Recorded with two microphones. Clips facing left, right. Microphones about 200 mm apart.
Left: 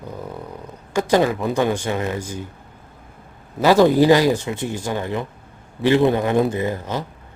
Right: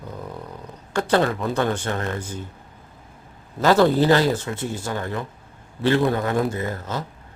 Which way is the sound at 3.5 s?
15° left (ahead or behind).